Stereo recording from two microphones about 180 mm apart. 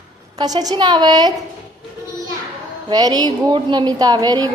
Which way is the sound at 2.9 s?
20° right (ahead or behind).